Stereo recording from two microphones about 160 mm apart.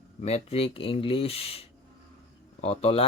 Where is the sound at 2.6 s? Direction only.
40° left (ahead or behind).